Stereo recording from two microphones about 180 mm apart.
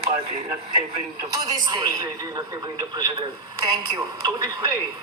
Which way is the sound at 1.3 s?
20° right (ahead or behind).